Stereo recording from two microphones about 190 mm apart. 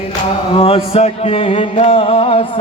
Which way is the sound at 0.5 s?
30° left (ahead or behind).